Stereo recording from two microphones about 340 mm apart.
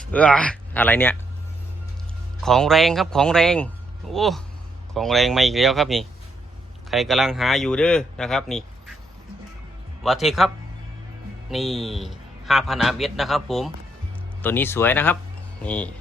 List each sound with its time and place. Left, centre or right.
0.1 s speech: centre
2.4 s a man's voice: centre
10.0 s a man's voice: centre
11.5 s a man's voice: centre